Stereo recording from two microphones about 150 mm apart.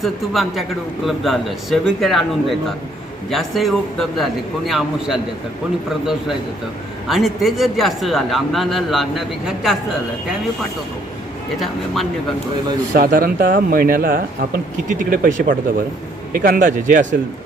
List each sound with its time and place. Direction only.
0.0 s speech: centre (ahead or behind)
7.1 s speech: centre (ahead or behind)
12.9 s speech: 75° right (ahead or behind)
14.8 s speech: 65° right (ahead or behind)